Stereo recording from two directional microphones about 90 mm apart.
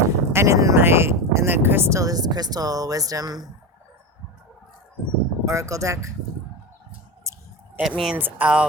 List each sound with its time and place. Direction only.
0.0 s speech: 35° right (ahead or behind)
5.5 s speech: 35° right (ahead or behind)
7.3 s a sound: 30° right (ahead or behind)
7.8 s speech: 5° right (ahead or behind)
8.1 s speech: 20° right (ahead or behind)